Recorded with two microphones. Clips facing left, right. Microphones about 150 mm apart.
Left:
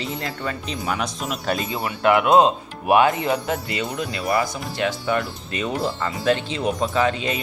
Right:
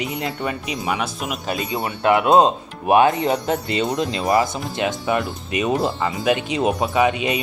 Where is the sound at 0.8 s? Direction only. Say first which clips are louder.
Right 1 dB; 5° right (ahead or behind).